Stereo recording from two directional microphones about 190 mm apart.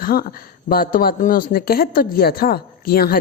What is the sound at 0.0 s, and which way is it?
Speech, 50° left (ahead or behind).